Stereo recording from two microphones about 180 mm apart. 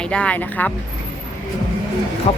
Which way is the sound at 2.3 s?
30° left (ahead or behind).